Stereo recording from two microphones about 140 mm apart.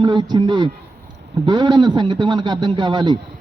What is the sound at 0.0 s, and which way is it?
A man's voice, 35° right (ahead or behind).